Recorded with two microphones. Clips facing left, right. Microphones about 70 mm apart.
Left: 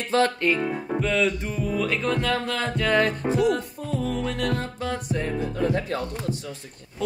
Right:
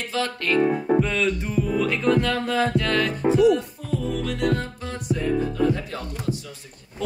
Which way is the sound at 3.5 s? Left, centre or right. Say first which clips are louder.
Right 1 dB; left.